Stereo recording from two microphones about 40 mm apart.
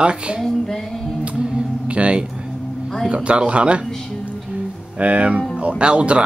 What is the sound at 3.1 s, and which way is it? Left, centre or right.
Speech, right.